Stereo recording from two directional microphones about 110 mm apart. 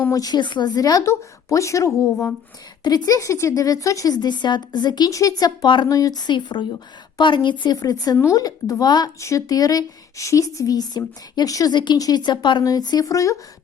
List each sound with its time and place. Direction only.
0.1 s a woman's voice: 35° left (ahead or behind)
5.6 s a woman's voice: 45° left (ahead or behind)
5.9 s a woman's voice: 35° left (ahead or behind)